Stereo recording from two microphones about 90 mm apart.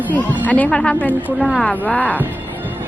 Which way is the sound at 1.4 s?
Centre (ahead or behind).